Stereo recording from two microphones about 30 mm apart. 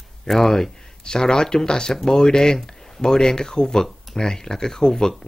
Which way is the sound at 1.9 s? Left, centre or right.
Centre.